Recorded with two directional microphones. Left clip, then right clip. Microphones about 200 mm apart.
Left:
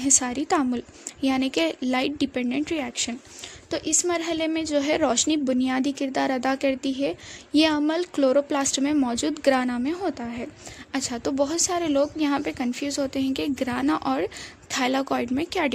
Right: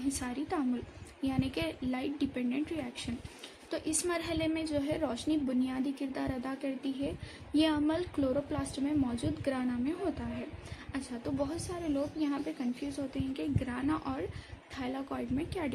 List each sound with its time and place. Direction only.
0.0 s a woman's voice: 45° left (ahead or behind)